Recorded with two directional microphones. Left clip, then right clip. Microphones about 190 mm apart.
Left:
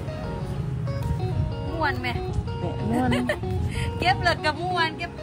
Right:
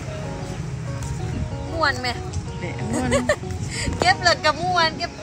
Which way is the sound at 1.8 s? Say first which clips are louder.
Right 4 dB; 20° right (ahead or behind).